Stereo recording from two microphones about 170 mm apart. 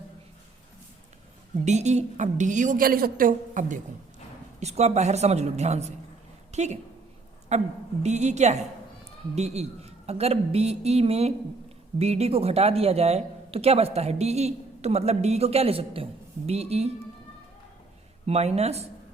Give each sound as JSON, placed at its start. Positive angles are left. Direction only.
{"t": 1.6, "sound": "a woman's voice", "side_deg": -45}
{"t": 4.6, "sound": "a woman's voice", "side_deg": -40}
{"t": 18.3, "sound": "speech", "side_deg": -40}